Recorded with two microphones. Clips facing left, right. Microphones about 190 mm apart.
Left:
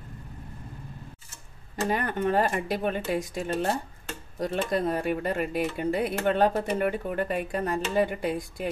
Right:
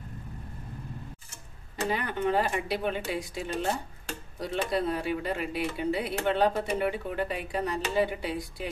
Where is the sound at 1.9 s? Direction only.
50° left (ahead or behind).